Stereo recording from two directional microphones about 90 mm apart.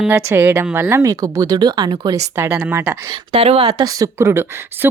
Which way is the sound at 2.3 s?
25° right (ahead or behind).